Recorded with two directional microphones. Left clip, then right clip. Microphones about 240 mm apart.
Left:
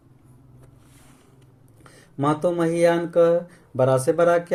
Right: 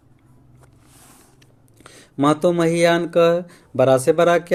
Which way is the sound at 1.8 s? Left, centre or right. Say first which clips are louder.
Right 5 dB; right.